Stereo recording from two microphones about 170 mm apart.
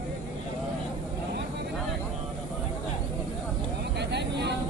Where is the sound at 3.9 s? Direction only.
85° right.